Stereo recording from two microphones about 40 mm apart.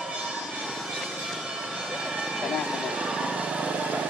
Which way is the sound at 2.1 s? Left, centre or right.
Centre.